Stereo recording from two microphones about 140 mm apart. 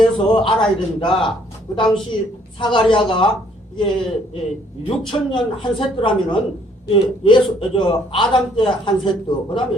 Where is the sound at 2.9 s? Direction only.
35° left (ahead or behind).